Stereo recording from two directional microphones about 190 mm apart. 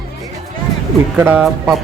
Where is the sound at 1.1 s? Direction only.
10° right (ahead or behind).